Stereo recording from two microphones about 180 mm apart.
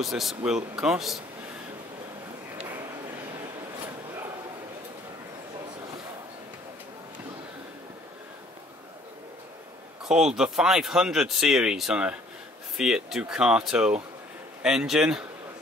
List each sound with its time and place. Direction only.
0.0 s speech: centre (ahead or behind)
10.0 s speech: 5° right (ahead or behind)